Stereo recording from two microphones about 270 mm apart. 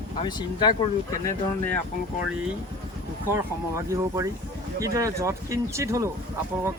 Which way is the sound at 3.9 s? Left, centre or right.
Centre.